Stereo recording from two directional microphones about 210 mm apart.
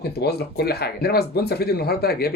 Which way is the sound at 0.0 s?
50° left (ahead or behind).